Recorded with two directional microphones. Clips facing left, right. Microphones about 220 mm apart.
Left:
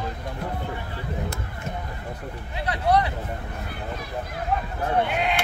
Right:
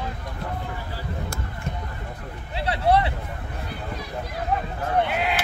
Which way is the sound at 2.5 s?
30° right (ahead or behind).